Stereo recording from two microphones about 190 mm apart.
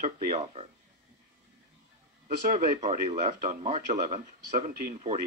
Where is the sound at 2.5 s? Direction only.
40° right (ahead or behind).